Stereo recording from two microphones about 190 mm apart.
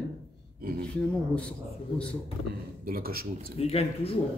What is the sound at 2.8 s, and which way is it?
Speech, 50° right (ahead or behind).